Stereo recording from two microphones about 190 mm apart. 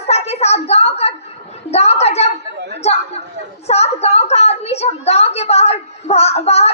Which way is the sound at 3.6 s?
35° left (ahead or behind).